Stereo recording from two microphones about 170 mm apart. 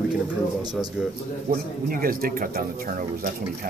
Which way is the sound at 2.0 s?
55° right (ahead or behind).